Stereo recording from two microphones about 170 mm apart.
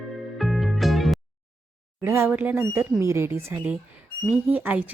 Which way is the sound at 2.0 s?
15° right (ahead or behind).